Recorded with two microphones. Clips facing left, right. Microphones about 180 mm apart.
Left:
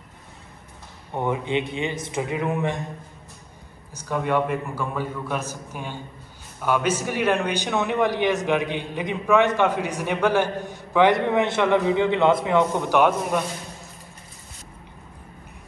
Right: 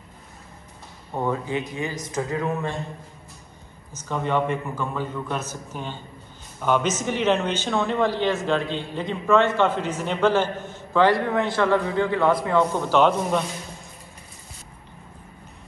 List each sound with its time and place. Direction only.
1.2 s a man's voice: 20° left (ahead or behind)
3.9 s a man's voice: 10° left (ahead or behind)